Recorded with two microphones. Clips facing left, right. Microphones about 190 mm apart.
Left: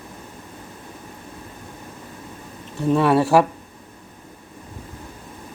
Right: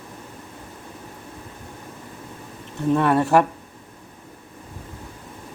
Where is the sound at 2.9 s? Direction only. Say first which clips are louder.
Left 2 dB; 10° left (ahead or behind).